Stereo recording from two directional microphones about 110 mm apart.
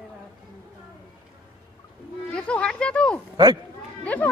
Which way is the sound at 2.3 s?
10° left (ahead or behind).